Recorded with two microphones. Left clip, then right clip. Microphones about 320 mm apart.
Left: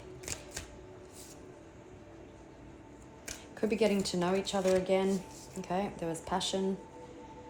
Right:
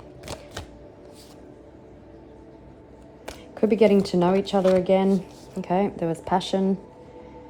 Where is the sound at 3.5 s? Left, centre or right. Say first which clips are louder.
Right 12 dB; right.